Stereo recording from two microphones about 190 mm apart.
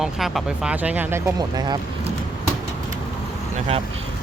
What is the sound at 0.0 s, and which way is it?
Speech, centre (ahead or behind).